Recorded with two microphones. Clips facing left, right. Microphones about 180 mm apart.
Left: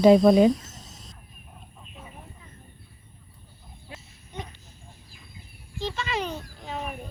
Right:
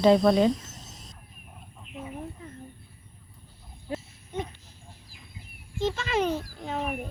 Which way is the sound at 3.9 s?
50° right (ahead or behind).